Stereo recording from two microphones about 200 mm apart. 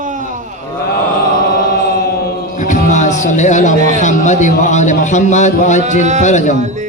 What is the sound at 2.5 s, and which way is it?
Music, 40° left (ahead or behind).